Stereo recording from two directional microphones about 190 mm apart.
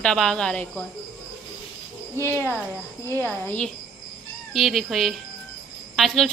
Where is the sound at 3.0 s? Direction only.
15° right (ahead or behind).